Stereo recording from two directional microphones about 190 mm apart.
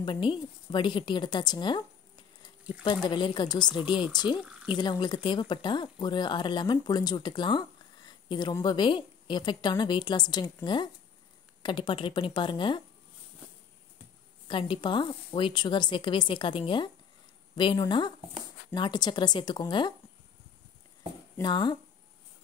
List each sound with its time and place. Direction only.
0.0 s speech: 25° left (ahead or behind)
2.8 s speech: 25° left (ahead or behind)
14.5 s speech: 25° left (ahead or behind)
21.4 s speech: 25° left (ahead or behind)